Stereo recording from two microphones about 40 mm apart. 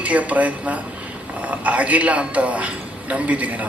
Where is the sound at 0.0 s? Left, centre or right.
Right.